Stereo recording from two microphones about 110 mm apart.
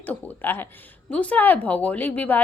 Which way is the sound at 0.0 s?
15° left (ahead or behind).